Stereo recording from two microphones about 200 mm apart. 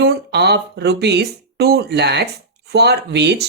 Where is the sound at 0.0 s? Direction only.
55° right (ahead or behind).